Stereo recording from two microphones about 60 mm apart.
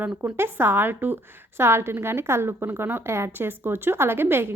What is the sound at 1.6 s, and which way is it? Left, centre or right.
Speech, right.